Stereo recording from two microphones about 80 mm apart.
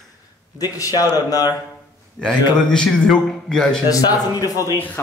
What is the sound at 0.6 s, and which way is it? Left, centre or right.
Speech, left.